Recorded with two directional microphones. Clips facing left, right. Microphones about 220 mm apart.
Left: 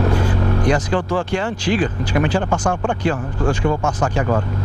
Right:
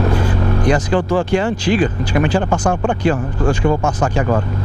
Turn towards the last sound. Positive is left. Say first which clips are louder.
# right 2 dB
turn(degrees=-15)  # may be behind; listen again after turning